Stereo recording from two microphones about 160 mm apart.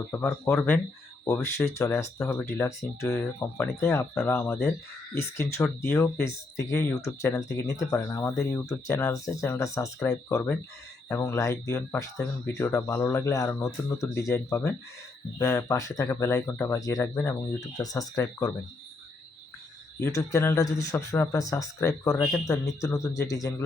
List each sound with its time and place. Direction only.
0.1 s speech: 15° left (ahead or behind)
15.4 s speech: 20° left (ahead or behind)
17.7 s speech: 20° left (ahead or behind)
20.1 s speech: 20° left (ahead or behind)